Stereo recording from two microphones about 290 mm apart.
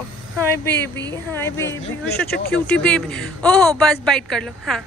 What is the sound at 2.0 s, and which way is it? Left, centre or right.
Speech, left.